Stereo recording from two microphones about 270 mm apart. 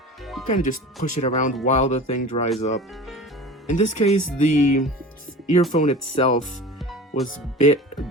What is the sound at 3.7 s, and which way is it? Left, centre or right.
Speech, left.